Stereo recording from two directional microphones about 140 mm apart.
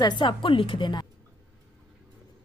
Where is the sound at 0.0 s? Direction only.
30° left (ahead or behind).